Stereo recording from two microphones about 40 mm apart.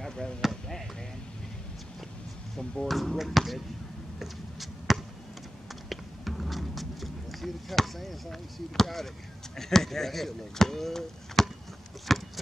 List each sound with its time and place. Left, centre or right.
0.0 s basketball bounce: centre
0.4 s basketball bounce: centre
2.5 s speech: centre
4.2 s a sound: centre
5.9 s music: centre
9.6 s speech: centre
12.1 s a sound: centre